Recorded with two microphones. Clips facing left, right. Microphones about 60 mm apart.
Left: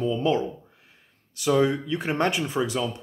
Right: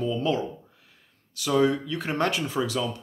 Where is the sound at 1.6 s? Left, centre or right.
Left.